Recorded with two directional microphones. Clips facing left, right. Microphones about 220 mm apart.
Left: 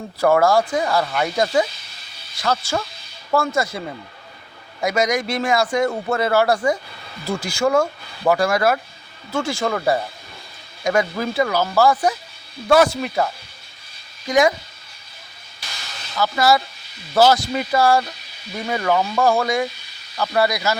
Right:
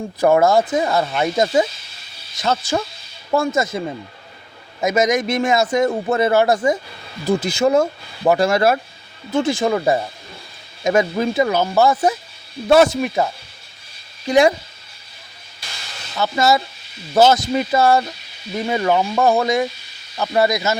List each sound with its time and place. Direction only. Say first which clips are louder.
0.2 s a man's voice: right 2 dB; 20° right (ahead or behind)
14.3 s a man's voice: right 3 dB; 30° right (ahead or behind)
16.1 s a man's voice: right 1 dB; 25° right (ahead or behind)